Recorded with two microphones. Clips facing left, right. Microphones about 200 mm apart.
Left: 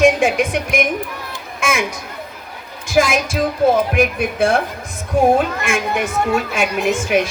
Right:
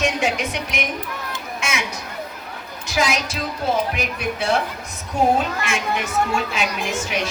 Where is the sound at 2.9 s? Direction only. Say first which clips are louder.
Left 6 dB; 50° left (ahead or behind).